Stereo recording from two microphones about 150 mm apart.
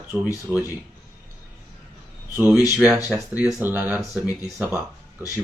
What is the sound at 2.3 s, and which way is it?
Speech, 10° right (ahead or behind).